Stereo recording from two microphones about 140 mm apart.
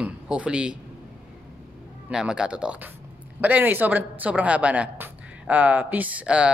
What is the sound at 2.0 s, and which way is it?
Speech, 5° right (ahead or behind).